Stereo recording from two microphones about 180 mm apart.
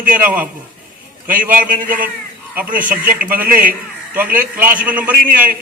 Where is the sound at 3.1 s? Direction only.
50° right (ahead or behind).